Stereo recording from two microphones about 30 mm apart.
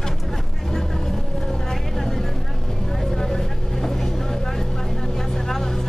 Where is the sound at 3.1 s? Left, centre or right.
Centre.